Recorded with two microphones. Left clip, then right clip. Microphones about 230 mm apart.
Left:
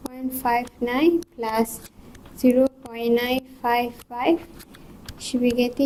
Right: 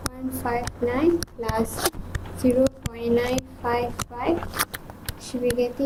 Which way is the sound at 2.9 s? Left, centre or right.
Left.